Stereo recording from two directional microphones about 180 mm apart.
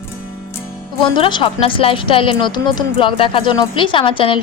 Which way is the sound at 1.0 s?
30° left (ahead or behind).